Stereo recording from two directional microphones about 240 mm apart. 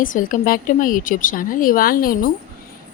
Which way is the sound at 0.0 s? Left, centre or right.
Left.